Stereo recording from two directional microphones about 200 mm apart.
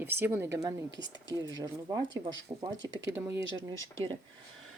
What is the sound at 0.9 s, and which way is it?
Speech, 65° right (ahead or behind).